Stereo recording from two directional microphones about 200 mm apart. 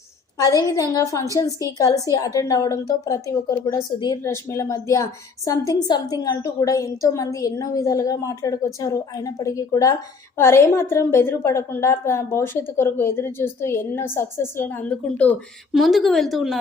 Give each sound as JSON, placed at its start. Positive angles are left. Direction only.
{"t": 0.3, "sound": "a woman's voice", "side_deg": 15}